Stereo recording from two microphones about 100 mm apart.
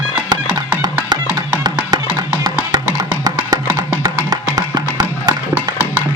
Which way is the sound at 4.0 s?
40° right (ahead or behind).